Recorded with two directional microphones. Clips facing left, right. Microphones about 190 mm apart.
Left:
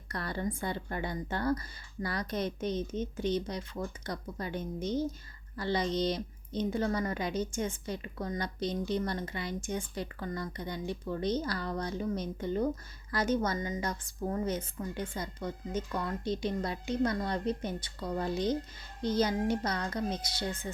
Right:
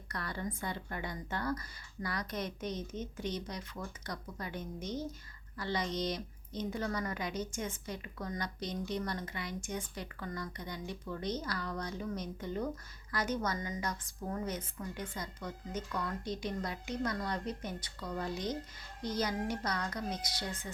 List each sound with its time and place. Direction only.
0.1 s a woman's voice: 30° left (ahead or behind)